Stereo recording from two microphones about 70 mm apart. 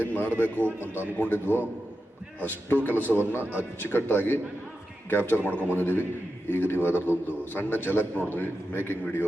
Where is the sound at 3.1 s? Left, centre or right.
Centre.